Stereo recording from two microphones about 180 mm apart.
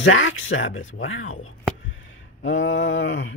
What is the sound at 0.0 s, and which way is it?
Speech, 90° left.